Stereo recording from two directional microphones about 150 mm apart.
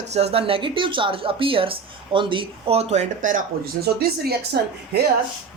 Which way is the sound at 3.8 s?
90° right.